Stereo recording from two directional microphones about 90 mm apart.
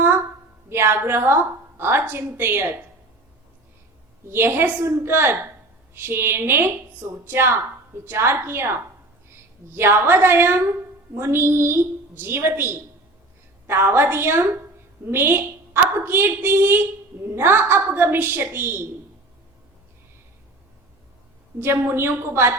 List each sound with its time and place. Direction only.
0.7 s a woman's voice: 25° right (ahead or behind)
4.3 s a woman's voice: 25° right (ahead or behind)
21.6 s a woman's voice: 25° right (ahead or behind)